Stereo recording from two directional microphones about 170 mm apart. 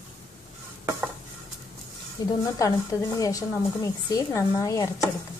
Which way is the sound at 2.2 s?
20° left (ahead or behind).